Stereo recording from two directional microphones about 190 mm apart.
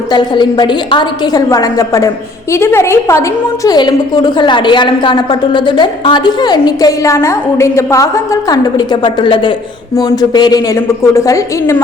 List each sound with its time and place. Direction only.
0.1 s a woman's voice: 20° left (ahead or behind)